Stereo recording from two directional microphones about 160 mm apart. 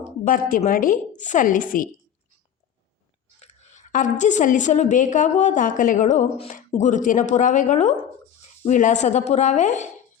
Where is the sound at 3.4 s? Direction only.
45° left (ahead or behind).